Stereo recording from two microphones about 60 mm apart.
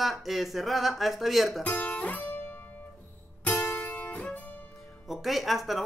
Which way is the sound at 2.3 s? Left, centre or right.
Left.